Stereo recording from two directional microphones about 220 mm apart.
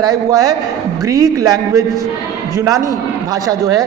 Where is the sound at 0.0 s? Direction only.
15° right (ahead or behind).